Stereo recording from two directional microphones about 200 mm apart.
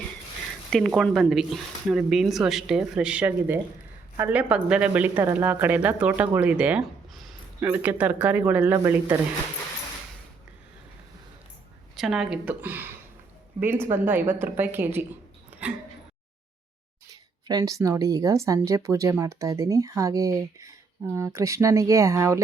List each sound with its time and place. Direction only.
0.7 s speech: centre (ahead or behind)
11.9 s speech: centre (ahead or behind)
17.1 s speech: 15° right (ahead or behind)